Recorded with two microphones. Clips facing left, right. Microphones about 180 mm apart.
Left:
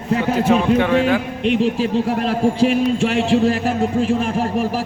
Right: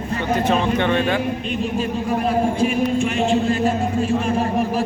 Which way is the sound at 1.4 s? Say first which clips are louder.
Left 6 dB; 75° left (ahead or behind).